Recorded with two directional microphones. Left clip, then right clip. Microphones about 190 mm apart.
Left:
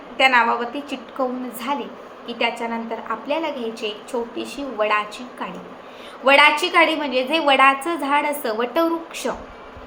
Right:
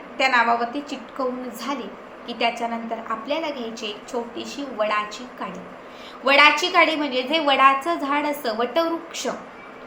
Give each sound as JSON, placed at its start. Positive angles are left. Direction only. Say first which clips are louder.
{"t": 0.2, "sound": "a woman's voice", "louder": "left 2 dB", "side_deg": 15}